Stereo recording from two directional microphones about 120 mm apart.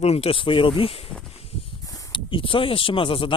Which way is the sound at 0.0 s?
60° left (ahead or behind).